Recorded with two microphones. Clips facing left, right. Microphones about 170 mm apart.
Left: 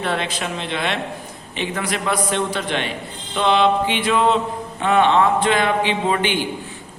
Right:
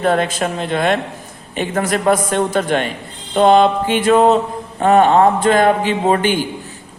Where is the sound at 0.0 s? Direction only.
45° right (ahead or behind).